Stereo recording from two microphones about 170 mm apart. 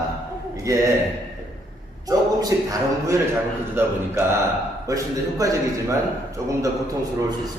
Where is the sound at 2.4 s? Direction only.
20° right (ahead or behind).